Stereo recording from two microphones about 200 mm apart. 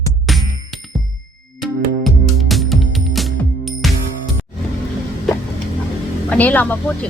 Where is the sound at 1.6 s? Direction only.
Centre (ahead or behind).